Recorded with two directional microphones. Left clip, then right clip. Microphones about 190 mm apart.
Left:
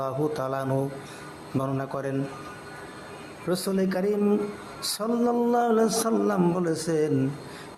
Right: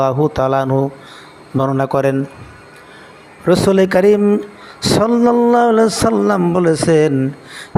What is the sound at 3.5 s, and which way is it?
A man's voice, 35° right (ahead or behind).